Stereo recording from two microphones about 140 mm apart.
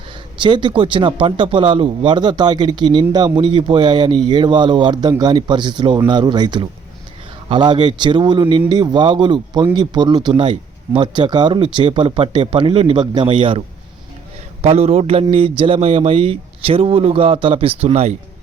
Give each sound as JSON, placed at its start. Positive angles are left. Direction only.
{"t": 0.3, "sound": "speech", "side_deg": -35}
{"t": 14.6, "sound": "a man's voice", "side_deg": -45}